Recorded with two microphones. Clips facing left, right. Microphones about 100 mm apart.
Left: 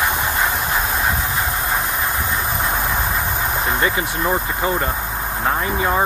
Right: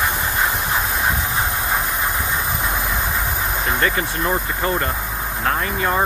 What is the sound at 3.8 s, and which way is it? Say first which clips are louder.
Speech: left 1 dB; 15° left (ahead or behind).